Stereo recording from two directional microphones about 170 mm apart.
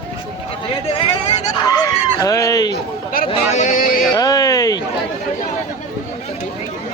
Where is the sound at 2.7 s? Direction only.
60° left (ahead or behind).